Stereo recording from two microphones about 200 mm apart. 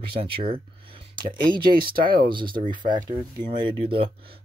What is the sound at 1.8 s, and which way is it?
Speech, 45° right (ahead or behind).